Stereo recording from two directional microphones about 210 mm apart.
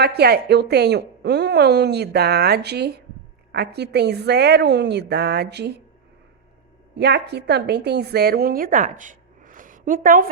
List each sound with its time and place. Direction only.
0.0 s a woman's voice: 50° right (ahead or behind)
6.9 s a woman's voice: 50° right (ahead or behind)